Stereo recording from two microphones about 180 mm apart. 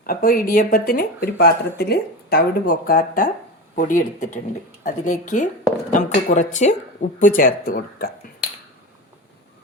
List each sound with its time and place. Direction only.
0.0 s speech: 55° left (ahead or behind)